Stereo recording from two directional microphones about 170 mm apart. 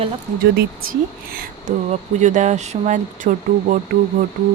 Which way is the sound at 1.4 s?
45° right (ahead or behind).